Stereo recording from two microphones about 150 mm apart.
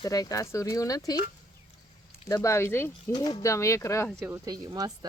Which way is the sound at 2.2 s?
20° left (ahead or behind).